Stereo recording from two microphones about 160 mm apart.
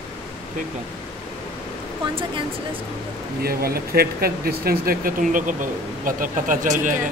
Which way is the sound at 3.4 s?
70° right (ahead or behind).